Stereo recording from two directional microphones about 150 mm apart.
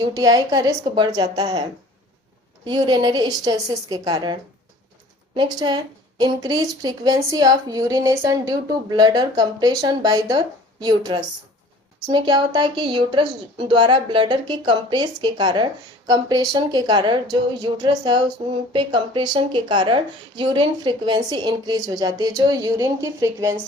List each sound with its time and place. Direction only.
0.1 s a woman's voice: 25° right (ahead or behind)
2.6 s a woman's voice: 30° right (ahead or behind)